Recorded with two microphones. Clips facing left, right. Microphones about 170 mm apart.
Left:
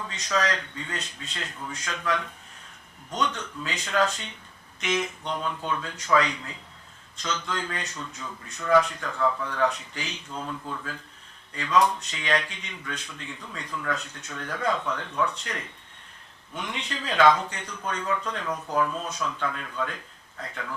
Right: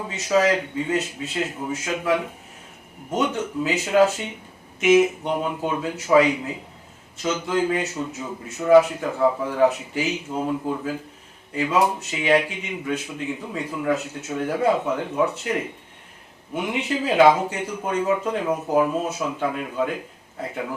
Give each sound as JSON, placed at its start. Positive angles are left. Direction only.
{"t": 0.3, "sound": "speech", "side_deg": -10}
{"t": 8.3, "sound": "speech", "side_deg": -20}
{"t": 8.9, "sound": "speech", "side_deg": -10}
{"t": 18.0, "sound": "speech", "side_deg": -20}